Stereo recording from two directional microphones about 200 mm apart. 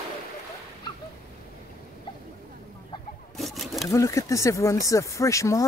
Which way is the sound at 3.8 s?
15° left (ahead or behind).